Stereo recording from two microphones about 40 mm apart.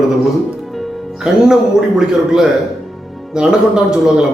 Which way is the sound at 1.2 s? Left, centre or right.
Centre.